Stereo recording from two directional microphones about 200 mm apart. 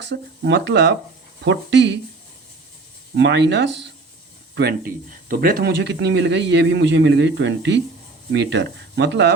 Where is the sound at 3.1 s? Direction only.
60° right (ahead or behind).